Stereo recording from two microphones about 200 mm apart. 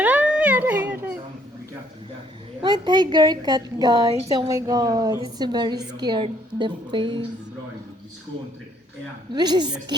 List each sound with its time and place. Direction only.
0.0 s a sound: 5° right (ahead or behind)
2.6 s a woman's voice: 20° right (ahead or behind)
9.3 s a woman's voice: 20° right (ahead or behind)